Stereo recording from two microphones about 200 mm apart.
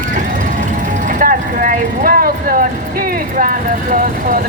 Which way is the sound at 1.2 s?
45° right (ahead or behind).